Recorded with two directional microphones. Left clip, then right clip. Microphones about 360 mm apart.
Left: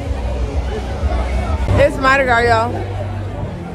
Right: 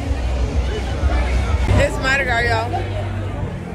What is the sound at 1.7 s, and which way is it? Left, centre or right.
Speech, left.